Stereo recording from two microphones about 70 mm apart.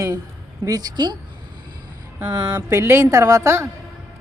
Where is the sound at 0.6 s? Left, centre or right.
Right.